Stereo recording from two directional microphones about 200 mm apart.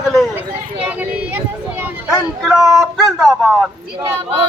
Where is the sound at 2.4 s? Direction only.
Centre (ahead or behind).